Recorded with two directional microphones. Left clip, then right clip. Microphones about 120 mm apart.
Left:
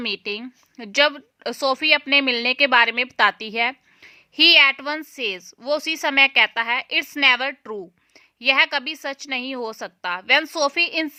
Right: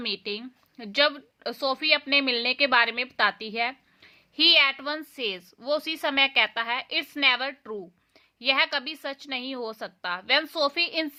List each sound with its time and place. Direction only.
0.0 s a woman's voice: 40° left (ahead or behind)
4.9 s a woman's voice: 30° left (ahead or behind)